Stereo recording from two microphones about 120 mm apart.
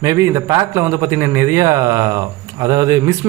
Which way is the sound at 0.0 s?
25° right (ahead or behind).